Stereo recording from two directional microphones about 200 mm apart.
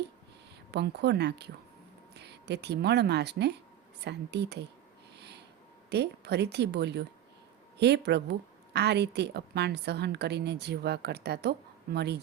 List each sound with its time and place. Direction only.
0.7 s a woman's voice: 55° right (ahead or behind)
5.1 s a sound: 55° right (ahead or behind)
5.9 s a woman's voice: 55° right (ahead or behind)